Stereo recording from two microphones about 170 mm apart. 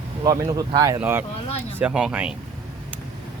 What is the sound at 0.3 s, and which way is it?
Speech, 20° right (ahead or behind).